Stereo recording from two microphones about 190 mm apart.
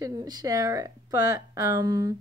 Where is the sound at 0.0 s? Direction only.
20° right (ahead or behind).